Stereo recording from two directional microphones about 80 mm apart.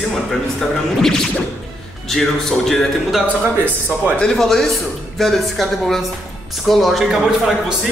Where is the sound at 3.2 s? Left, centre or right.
Right.